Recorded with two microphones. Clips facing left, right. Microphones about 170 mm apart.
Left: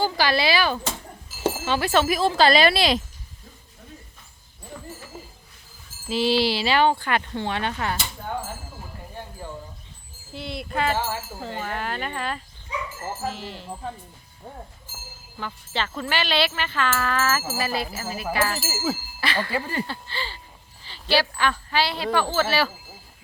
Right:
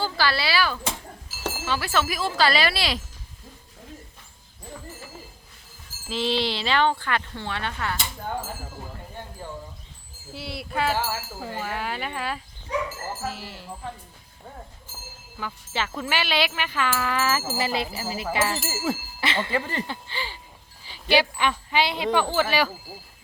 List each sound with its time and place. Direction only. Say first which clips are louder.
0.0 s speech: left 3 dB; 15° left (ahead or behind)
6.1 s speech: left 4 dB; 5° left (ahead or behind)
10.3 s speech: left 1 dB; 5° right (ahead or behind)
15.4 s speech: left 1 dB; 10° right (ahead or behind)
18.6 s speech: even; 5° left (ahead or behind)
19.2 s speech: left 1 dB; 20° right (ahead or behind)
19.5 s speech: even; 10° left (ahead or behind)
19.9 s speech: even; 15° right (ahead or behind)